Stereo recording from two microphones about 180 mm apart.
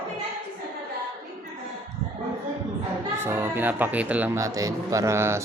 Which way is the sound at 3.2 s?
15° right (ahead or behind).